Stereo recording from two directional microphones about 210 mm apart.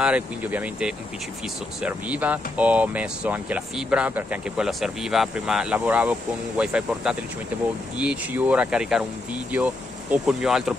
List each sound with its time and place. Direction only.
0.0 s speech: 5° right (ahead or behind)